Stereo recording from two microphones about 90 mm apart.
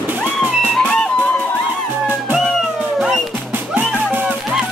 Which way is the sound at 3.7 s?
20° right (ahead or behind).